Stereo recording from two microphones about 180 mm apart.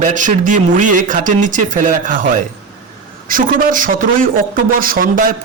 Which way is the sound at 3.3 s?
50° right (ahead or behind).